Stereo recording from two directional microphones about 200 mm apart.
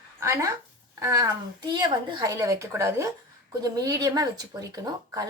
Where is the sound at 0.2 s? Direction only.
15° right (ahead or behind).